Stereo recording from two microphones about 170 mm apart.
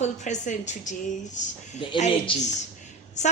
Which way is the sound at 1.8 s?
30° left (ahead or behind).